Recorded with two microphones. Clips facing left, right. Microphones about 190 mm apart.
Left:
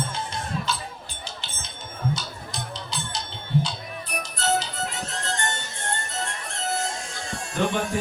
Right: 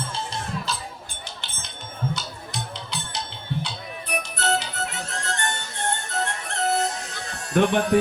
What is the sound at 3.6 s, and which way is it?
Music, 60° right (ahead or behind).